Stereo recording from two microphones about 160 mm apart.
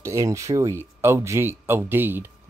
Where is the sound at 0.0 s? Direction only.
20° right (ahead or behind).